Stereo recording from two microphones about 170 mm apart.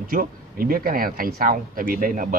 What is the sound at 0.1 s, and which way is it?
Speech, 60° right (ahead or behind).